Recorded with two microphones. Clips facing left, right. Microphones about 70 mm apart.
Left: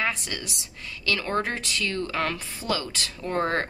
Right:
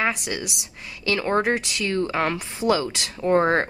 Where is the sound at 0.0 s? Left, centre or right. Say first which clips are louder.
Right 4 dB; centre.